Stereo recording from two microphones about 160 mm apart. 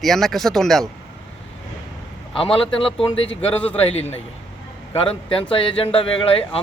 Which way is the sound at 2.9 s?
35° left (ahead or behind).